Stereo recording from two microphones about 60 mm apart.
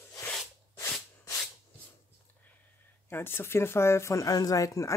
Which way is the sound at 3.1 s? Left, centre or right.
Left.